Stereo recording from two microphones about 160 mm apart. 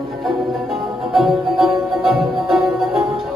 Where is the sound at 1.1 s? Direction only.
Centre (ahead or behind).